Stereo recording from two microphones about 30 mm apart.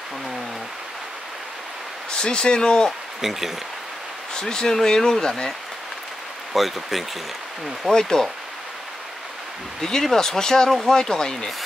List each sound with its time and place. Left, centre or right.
2.0 s speech: left
3.2 s speech: centre
4.3 s speech: left
6.5 s speech: centre
7.9 s speech: centre
9.8 s speech: centre